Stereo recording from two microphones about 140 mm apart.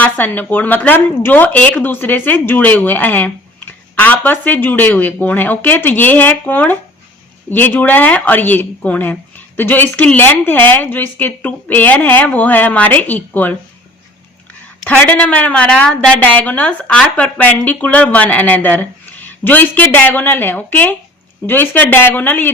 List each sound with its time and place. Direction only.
0.0 s speech: 15° left (ahead or behind)
14.8 s speech: 10° left (ahead or behind)